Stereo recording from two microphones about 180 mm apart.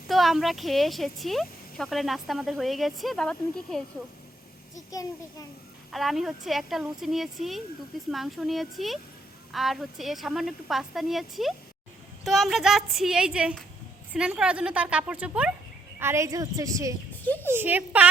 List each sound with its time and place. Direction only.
0.1 s speech: centre (ahead or behind)
4.9 s a child's voice: 20° left (ahead or behind)
5.9 s a woman's voice: centre (ahead or behind); by 16.9 s 20° right (ahead or behind)
17.2 s a sound: 10° left (ahead or behind)
17.5 s a woman's voice: 10° right (ahead or behind)